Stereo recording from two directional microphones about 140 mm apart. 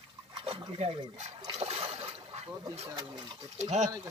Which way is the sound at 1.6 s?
45° right (ahead or behind).